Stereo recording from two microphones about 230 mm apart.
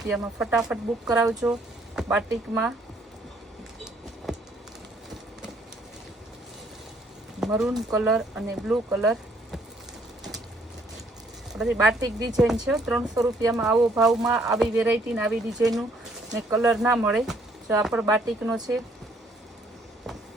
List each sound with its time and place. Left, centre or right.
0.0 s speech: centre
4.3 s a sound: centre
7.3 s speech: centre
11.5 s speech: centre
11.9 s speech: centre
12.6 s speech: centre